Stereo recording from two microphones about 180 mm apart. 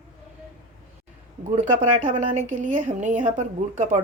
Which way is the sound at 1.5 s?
45° right (ahead or behind).